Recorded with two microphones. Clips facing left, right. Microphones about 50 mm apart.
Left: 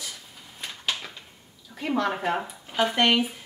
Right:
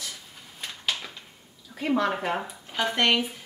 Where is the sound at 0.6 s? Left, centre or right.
Centre.